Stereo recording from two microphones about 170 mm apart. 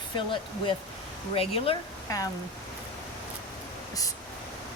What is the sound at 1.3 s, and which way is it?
Speech, 35° left (ahead or behind).